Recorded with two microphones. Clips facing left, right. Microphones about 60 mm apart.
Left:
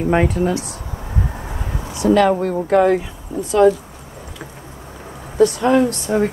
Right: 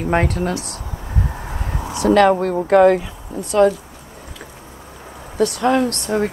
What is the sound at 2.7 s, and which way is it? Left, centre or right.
Speech, centre.